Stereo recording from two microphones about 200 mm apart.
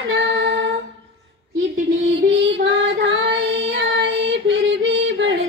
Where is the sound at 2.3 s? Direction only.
60° right (ahead or behind).